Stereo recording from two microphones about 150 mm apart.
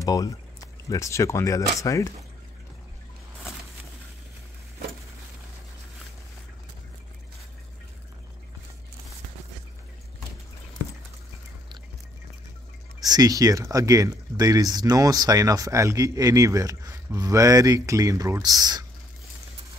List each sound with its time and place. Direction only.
0.0 s speech: 25° left (ahead or behind)
13.0 s speech: 25° right (ahead or behind)